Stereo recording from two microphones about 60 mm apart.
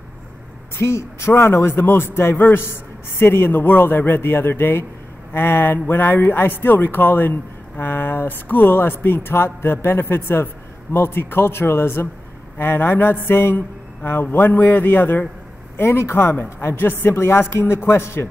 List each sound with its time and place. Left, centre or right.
0.7 s a man's voice: left